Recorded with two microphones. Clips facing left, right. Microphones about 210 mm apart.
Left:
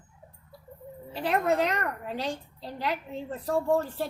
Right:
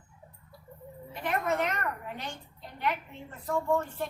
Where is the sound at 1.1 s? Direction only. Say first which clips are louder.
Left 5 dB; 35° left (ahead or behind).